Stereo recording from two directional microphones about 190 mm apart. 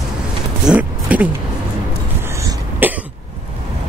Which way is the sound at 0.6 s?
5° right (ahead or behind).